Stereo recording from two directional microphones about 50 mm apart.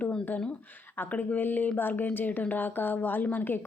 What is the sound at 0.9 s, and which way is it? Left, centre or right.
A woman's voice, left.